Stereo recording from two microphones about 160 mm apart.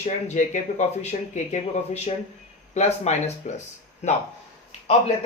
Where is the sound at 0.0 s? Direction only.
45° left (ahead or behind).